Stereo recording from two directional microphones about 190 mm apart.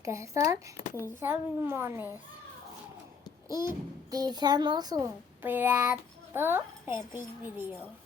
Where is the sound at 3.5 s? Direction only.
15° right (ahead or behind).